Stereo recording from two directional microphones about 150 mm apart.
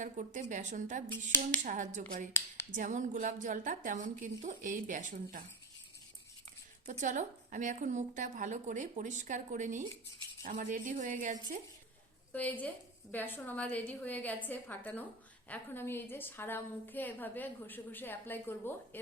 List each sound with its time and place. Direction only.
0.0 s a woman's voice: 55° right (ahead or behind)
1.3 s a woman's voice: 15° left (ahead or behind)
1.6 s a woman's voice: 60° right (ahead or behind)
6.9 s a woman's voice: 55° right (ahead or behind)
12.3 s a woman's voice: 10° left (ahead or behind)